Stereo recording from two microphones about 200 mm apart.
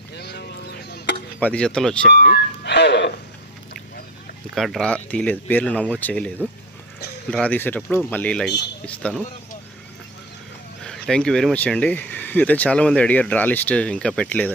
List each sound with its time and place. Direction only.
0.1 s a sound: 55° left (ahead or behind)
1.4 s speech: 5° left (ahead or behind)
2.1 s speech: 50° left (ahead or behind)
4.5 s speech: centre (ahead or behind)
10.8 s speech: 5° left (ahead or behind)